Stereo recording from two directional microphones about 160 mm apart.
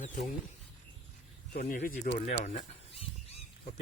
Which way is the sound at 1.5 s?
60° left (ahead or behind).